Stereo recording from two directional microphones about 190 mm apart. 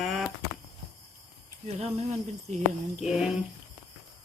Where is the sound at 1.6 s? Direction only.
35° right (ahead or behind).